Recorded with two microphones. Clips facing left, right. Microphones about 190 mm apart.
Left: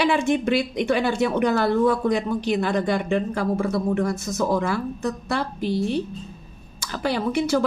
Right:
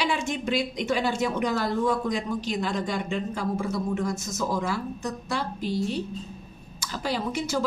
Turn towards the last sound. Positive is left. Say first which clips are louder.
# left 6 dB
turn(degrees=60)  # may be behind; listen again after turning